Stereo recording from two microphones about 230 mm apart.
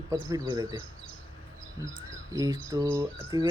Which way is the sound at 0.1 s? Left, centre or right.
Centre.